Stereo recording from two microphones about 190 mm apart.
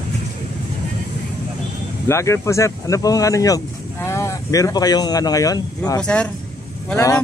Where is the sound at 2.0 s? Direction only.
15° left (ahead or behind).